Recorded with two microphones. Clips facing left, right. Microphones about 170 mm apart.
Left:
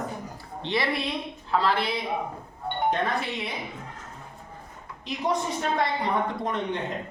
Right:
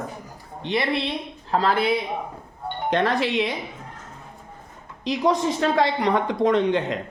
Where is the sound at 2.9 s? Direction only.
90° right.